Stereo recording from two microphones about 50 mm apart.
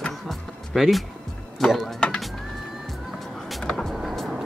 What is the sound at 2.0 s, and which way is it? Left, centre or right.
Music, left.